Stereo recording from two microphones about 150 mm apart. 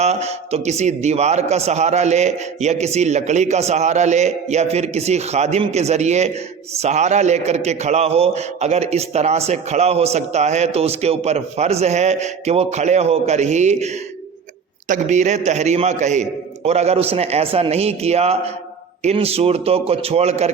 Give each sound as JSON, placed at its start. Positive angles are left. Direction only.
{"t": 0.0, "sound": "a man's voice", "side_deg": -45}